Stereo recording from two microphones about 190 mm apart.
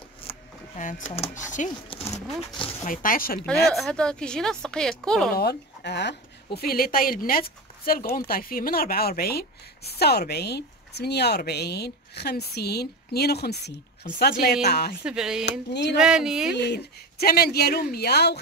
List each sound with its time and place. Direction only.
0.3 s a sound: 40° left (ahead or behind)
1.1 s speech: 35° left (ahead or behind)
2.9 s speech: 45° left (ahead or behind)
3.7 s a woman's voice: centre (ahead or behind)
5.3 s speech: 55° left (ahead or behind)
15.0 s a woman's voice: 5° right (ahead or behind)
15.7 s speech: 60° left (ahead or behind)
16.0 s a woman's voice: 5° right (ahead or behind)
16.5 s speech: 60° left (ahead or behind)